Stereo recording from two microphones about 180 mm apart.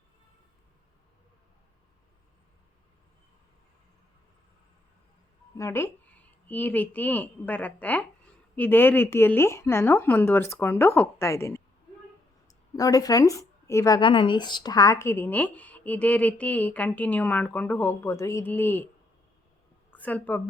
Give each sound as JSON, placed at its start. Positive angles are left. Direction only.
{"t": 5.5, "sound": "a woman's voice", "side_deg": 15}
{"t": 19.9, "sound": "a woman's voice", "side_deg": 10}